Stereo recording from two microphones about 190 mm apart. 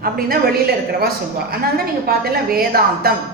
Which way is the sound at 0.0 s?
50° right (ahead or behind).